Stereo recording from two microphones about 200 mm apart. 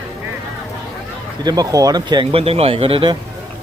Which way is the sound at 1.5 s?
20° right (ahead or behind).